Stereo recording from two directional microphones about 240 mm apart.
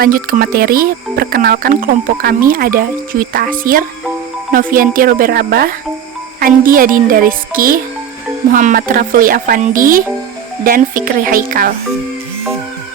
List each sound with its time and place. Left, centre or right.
0.0 s speech: right